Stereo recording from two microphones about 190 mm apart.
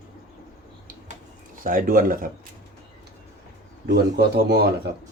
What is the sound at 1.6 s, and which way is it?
Speech, 45° right (ahead or behind).